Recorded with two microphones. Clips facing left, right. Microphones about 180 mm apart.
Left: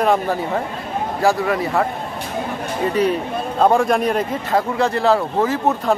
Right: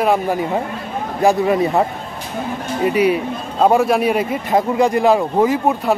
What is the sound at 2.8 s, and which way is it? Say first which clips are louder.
Speech: right 3 dB; 10° right (ahead or behind).